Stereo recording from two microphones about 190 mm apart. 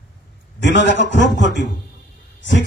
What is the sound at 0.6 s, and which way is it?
A man's voice, 70° left (ahead or behind).